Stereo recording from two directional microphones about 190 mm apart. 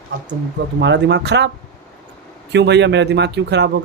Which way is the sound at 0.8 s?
65° right (ahead or behind).